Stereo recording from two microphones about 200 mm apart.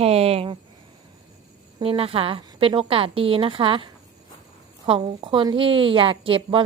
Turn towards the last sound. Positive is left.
turn(degrees=-25)  # may be behind; listen again after turning